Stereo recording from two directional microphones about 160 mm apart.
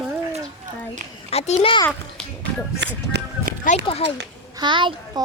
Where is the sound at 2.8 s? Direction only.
90° right.